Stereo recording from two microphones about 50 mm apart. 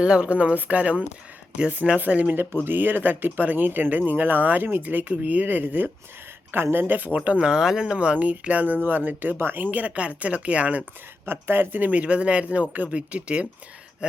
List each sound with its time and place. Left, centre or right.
0.0 s speech: right
2.6 s speech: right
6.5 s speech: right
7.3 s speech: centre; by 9.6 s right
9.7 s speech: right
11.3 s speech: right